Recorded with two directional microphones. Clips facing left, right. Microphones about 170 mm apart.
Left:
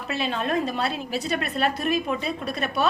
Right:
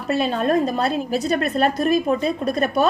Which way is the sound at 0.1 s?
45° right (ahead or behind).